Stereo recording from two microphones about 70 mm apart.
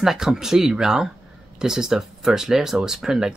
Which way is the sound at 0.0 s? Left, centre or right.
Centre.